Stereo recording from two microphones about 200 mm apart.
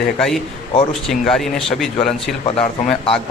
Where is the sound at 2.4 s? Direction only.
30° left (ahead or behind).